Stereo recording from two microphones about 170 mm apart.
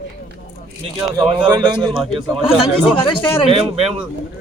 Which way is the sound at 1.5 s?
25° right (ahead or behind).